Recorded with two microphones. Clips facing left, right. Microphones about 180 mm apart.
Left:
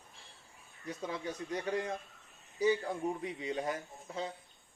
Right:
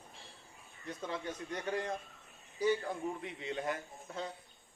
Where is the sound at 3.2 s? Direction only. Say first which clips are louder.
Left 2 dB; 20° left (ahead or behind).